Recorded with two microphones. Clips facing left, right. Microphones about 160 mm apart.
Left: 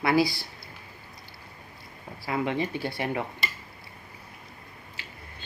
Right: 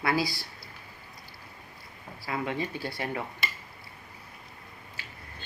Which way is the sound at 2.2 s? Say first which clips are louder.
Left 4 dB; 25° left (ahead or behind).